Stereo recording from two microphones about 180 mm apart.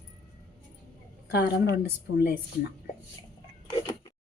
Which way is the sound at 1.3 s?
65° left (ahead or behind).